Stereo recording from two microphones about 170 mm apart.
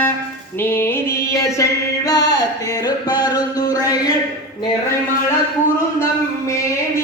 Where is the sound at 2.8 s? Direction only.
25° left (ahead or behind).